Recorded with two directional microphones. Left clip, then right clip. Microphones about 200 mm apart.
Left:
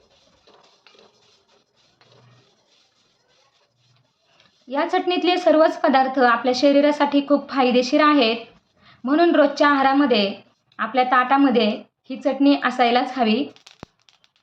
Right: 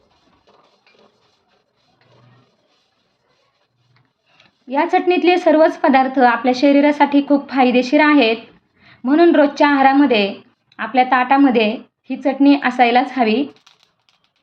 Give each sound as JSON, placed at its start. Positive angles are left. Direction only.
{"t": 4.4, "sound": "a woman's voice", "side_deg": -5}